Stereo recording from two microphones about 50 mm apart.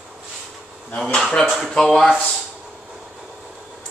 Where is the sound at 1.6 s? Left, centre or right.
Centre.